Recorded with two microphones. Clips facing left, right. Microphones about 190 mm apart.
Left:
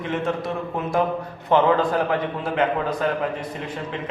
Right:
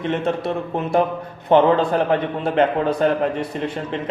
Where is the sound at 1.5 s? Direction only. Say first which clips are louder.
Right 3 dB; 25° right (ahead or behind).